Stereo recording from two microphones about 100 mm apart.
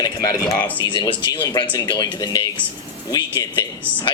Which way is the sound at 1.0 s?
55° left (ahead or behind).